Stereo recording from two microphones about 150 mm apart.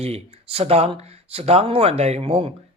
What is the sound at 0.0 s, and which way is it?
Speech, 40° right (ahead or behind).